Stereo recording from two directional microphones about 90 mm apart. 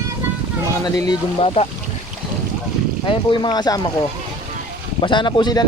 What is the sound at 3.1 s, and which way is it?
Speech, 65° left (ahead or behind).